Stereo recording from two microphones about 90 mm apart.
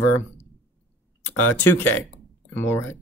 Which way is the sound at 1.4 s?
20° left (ahead or behind).